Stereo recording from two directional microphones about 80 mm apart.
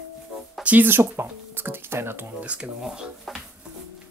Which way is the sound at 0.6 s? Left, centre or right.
Right.